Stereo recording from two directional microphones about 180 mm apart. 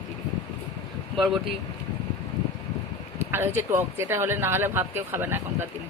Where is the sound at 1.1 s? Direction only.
Centre (ahead or behind).